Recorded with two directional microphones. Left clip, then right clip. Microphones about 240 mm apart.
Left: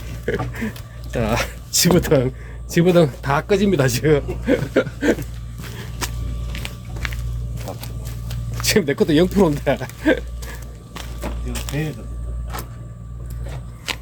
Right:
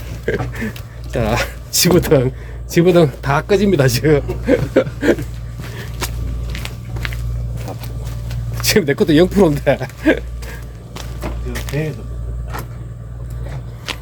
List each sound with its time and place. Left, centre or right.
0.3 s speech: centre
6.0 s walk: left
6.5 s biting: centre
8.6 s speech: centre
11.2 s a sound: left
12.5 s vehicle: left
13.9 s a sound: left